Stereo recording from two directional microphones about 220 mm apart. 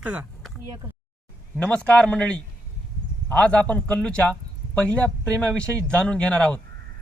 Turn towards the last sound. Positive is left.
turn(degrees=5)  # may be behind; listen again after turning